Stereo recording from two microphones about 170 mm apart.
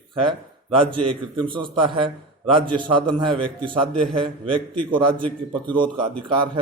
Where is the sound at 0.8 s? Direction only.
30° right (ahead or behind).